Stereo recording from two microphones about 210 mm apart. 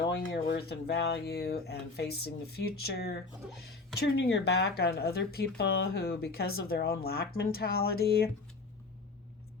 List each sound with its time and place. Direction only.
0.1 s speech: 60° left (ahead or behind)